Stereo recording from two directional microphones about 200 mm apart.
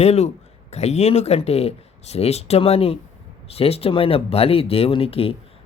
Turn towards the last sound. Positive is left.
turn(degrees=30)  # may be behind; listen again after turning